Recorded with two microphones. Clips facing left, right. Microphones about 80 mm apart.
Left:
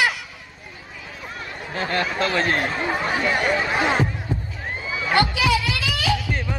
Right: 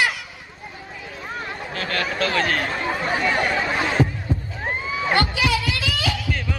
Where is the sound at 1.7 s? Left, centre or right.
Left.